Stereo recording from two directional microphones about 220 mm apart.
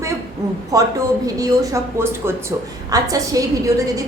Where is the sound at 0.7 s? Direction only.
15° right (ahead or behind).